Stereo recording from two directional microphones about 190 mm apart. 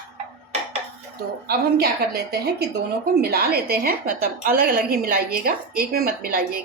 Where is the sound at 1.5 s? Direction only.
55° right (ahead or behind).